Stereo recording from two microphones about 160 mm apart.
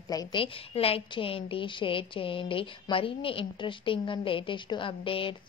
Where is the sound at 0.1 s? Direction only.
25° left (ahead or behind).